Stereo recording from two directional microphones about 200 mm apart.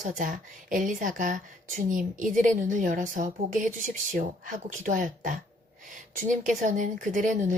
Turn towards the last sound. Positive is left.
turn(degrees=-40)  # may be behind; listen again after turning